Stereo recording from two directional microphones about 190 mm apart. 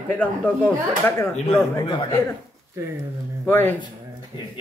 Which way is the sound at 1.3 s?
35° left (ahead or behind).